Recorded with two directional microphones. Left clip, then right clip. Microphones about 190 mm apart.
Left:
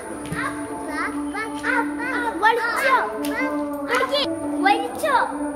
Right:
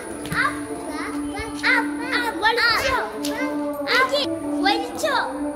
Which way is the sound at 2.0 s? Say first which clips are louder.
Left 1 dB; 20° left (ahead or behind).